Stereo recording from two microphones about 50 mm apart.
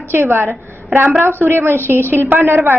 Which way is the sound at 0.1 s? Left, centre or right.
Right.